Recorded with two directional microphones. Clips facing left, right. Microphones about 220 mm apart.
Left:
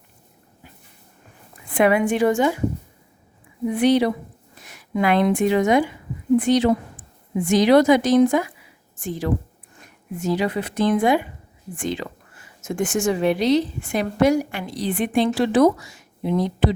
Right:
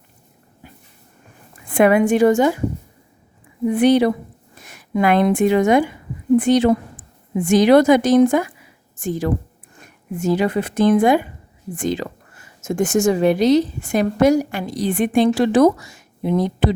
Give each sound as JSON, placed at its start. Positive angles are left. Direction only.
{"t": 1.7, "sound": "a woman's voice", "side_deg": -50}
{"t": 3.8, "sound": "a woman's voice", "side_deg": -50}